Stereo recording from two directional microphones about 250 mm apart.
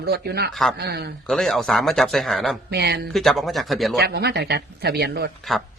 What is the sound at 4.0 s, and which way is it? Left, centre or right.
Speech, right.